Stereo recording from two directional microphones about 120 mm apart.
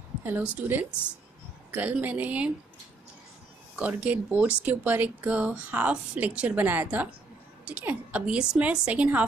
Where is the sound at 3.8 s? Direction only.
10° right (ahead or behind).